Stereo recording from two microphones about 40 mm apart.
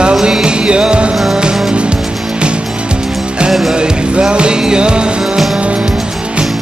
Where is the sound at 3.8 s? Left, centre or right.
Right.